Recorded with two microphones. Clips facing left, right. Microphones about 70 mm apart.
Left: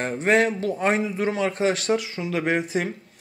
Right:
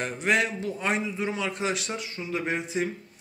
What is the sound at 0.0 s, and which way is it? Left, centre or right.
Speech, left.